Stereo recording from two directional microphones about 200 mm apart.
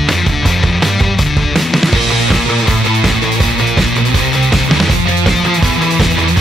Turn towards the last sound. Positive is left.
turn(degrees=0)  # may be behind; listen again after turning